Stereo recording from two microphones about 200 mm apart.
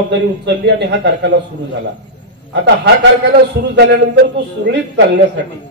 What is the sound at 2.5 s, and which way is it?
Speech, 60° right (ahead or behind).